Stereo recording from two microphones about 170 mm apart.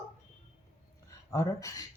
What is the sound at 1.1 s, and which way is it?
Speech, 20° left (ahead or behind).